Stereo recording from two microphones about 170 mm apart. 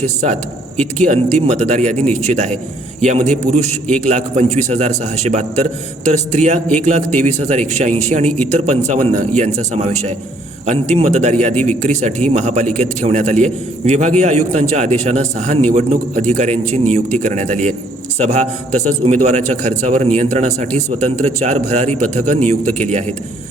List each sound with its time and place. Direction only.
0.0 s a man's voice: 40° right (ahead or behind)